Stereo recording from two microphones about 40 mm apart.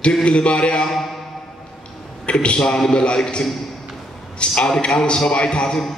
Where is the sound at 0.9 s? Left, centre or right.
Centre.